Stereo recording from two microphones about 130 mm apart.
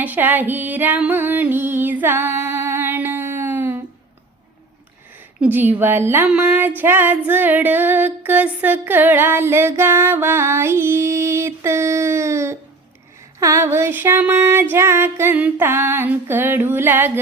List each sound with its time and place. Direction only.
0.0 s music: 15° right (ahead or behind)
5.4 s music: 15° right (ahead or behind)